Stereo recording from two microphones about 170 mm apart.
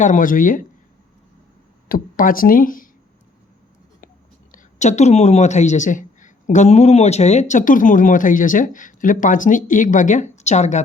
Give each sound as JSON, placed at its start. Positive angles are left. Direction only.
{"t": 0.0, "sound": "speech", "side_deg": 50}
{"t": 1.9, "sound": "speech", "side_deg": 55}
{"t": 4.5, "sound": "speech", "side_deg": 45}